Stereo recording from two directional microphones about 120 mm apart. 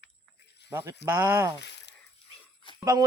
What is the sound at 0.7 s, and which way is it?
Speech, 30° right (ahead or behind).